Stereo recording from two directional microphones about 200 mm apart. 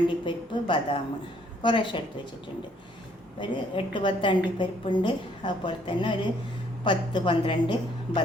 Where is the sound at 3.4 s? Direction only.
25° left (ahead or behind).